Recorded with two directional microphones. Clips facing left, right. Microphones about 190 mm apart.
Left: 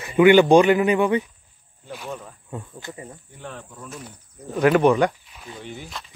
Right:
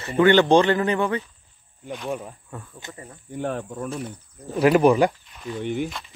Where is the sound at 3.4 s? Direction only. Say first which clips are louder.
Right 11 dB; 55° right (ahead or behind).